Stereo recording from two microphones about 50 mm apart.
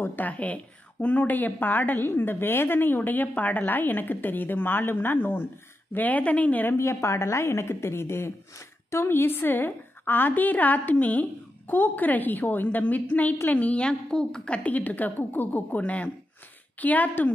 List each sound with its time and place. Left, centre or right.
0.0 s a woman's voice: left
5.9 s a woman's voice: left
6.8 s a woman's voice: left
9.0 s a woman's voice: left